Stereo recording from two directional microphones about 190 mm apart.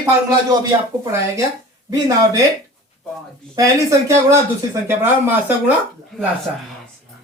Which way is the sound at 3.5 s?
15° right (ahead or behind).